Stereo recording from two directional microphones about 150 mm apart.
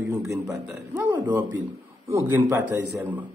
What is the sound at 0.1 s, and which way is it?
A man's voice, 20° right (ahead or behind).